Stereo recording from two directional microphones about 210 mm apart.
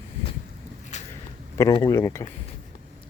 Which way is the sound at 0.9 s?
35° left (ahead or behind).